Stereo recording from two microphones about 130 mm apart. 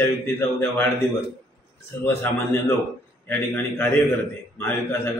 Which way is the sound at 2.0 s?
15° left (ahead or behind).